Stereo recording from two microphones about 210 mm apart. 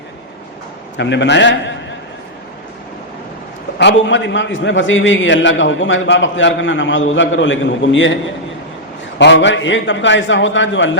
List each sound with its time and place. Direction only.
0.9 s a man's voice: 55° left (ahead or behind)
3.8 s a man's voice: 60° left (ahead or behind)
9.1 s a man's voice: 60° left (ahead or behind)